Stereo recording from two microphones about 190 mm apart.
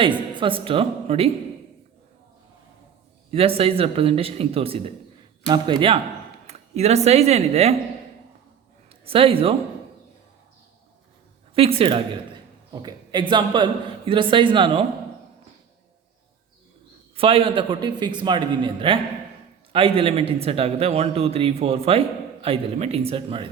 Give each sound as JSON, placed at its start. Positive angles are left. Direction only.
{"t": 0.3, "sound": "a man's voice", "side_deg": -25}
{"t": 3.3, "sound": "a man's voice", "side_deg": -30}
{"t": 8.9, "sound": "speech", "side_deg": -30}
{"t": 11.5, "sound": "a man's voice", "side_deg": -30}
{"t": 17.2, "sound": "a man's voice", "side_deg": -30}